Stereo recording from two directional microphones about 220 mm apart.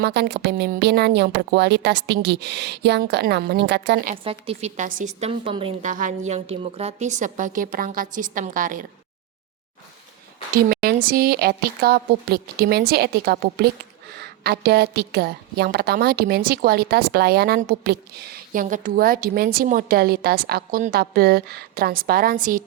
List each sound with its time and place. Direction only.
0.0 s a woman's voice: 50° right (ahead or behind)
4.2 s speech: 25° right (ahead or behind)
5.9 s a woman's voice: 35° right (ahead or behind)
10.5 s a woman's voice: 45° right (ahead or behind)